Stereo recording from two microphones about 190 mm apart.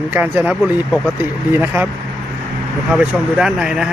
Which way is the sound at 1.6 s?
10° right (ahead or behind).